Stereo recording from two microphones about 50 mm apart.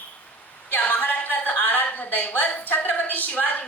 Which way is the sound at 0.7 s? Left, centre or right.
Left.